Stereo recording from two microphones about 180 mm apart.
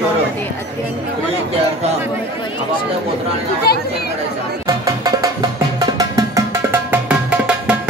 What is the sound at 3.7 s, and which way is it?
Speech, 60° left (ahead or behind).